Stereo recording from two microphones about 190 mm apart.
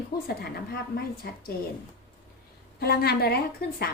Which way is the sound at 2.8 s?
55° left (ahead or behind).